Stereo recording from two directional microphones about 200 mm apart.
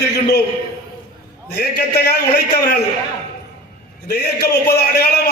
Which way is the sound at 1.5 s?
50° left (ahead or behind).